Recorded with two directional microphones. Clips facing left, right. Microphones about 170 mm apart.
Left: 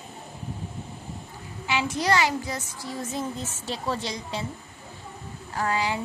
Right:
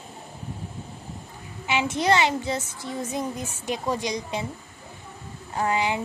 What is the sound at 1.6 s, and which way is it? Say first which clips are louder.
A child's voice: right 2 dB; 20° right (ahead or behind).